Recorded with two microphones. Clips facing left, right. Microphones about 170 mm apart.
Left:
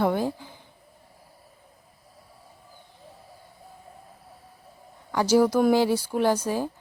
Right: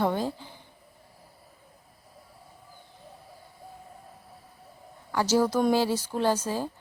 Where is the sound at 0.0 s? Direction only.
10° left (ahead or behind).